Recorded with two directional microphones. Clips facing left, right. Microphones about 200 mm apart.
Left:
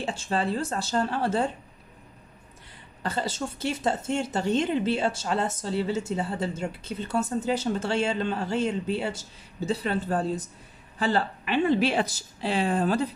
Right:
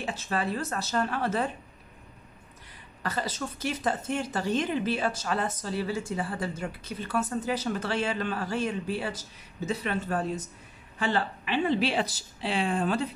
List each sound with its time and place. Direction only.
0.0 s a woman's voice: 30° left (ahead or behind)
3.0 s a woman's voice: 30° left (ahead or behind)